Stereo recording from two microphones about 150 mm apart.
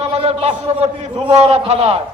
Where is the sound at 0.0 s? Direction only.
45° right (ahead or behind).